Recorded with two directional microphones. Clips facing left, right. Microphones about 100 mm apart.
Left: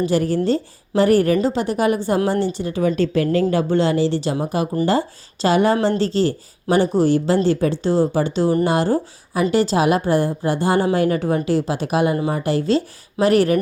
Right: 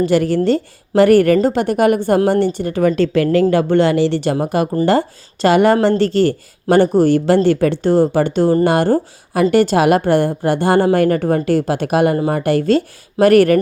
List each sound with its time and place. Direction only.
0.0 s a woman's voice: 75° right (ahead or behind)
3.5 s a woman's voice: 65° right (ahead or behind)